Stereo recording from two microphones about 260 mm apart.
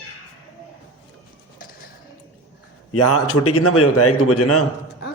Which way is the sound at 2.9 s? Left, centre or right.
Left.